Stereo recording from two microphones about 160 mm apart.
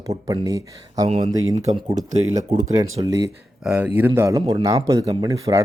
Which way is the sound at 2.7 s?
25° right (ahead or behind).